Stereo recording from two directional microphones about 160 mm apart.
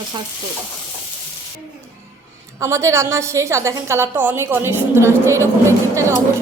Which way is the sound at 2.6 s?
20° right (ahead or behind).